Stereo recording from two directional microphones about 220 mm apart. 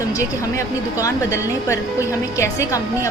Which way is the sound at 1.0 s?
15° left (ahead or behind).